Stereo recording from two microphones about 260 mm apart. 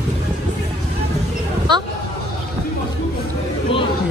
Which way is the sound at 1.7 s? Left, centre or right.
Centre.